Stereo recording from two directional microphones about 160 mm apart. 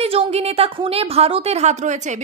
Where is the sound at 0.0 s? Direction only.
40° right (ahead or behind).